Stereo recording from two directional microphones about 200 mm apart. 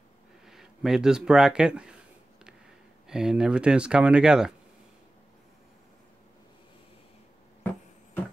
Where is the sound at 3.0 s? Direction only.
5° right (ahead or behind).